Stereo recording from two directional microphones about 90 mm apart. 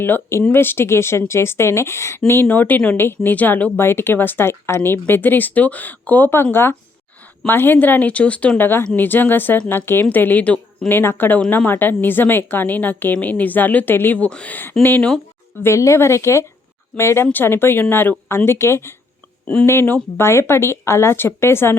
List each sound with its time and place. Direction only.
0.0 s a woman's voice: 25° left (ahead or behind)
15.6 s a woman's voice: 30° left (ahead or behind)